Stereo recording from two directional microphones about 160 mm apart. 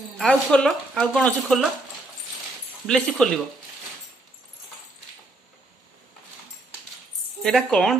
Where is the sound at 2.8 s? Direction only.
5° left (ahead or behind).